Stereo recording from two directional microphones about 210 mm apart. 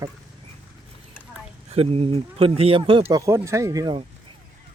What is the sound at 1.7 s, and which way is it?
Speech, 30° right (ahead or behind).